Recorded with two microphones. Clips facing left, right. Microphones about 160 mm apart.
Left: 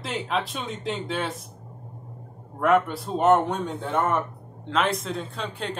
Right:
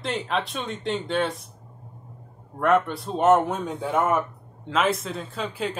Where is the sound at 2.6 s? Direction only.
Centre (ahead or behind).